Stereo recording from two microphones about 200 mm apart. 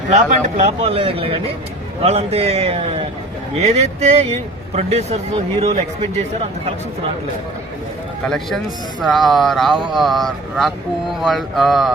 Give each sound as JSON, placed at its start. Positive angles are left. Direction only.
{"t": 0.1, "sound": "speech", "side_deg": -40}
{"t": 8.2, "sound": "speech", "side_deg": 5}